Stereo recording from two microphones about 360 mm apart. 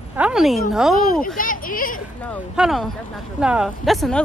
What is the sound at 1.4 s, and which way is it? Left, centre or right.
Speech, left.